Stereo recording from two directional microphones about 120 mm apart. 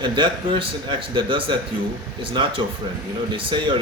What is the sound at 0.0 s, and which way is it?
Speech, 40° right (ahead or behind).